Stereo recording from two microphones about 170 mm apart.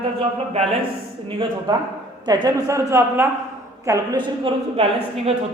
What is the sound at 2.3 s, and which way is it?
A woman's voice, 25° right (ahead or behind).